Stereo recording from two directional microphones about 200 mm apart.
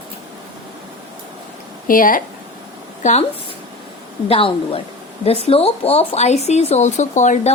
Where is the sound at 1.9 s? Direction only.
45° left (ahead or behind).